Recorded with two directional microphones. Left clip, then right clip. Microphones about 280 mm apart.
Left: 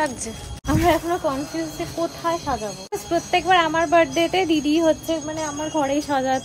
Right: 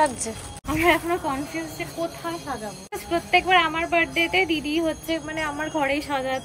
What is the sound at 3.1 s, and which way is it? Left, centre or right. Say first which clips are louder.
Speech: left 1 dB; centre.